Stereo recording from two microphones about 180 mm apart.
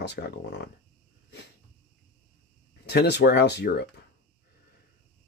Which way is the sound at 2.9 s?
70° left (ahead or behind).